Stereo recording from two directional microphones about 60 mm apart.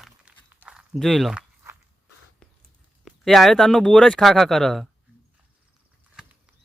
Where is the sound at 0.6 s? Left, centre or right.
Right.